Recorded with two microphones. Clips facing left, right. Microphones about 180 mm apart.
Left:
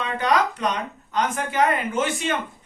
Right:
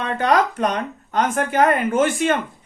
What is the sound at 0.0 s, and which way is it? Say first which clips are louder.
Speech: right 3 dB; 50° right (ahead or behind).